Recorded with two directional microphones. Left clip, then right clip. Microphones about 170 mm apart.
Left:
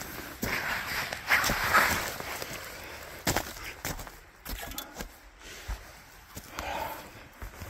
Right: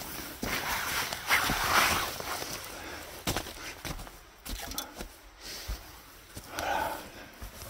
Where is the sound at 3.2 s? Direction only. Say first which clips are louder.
Left 4 dB; 50° left (ahead or behind).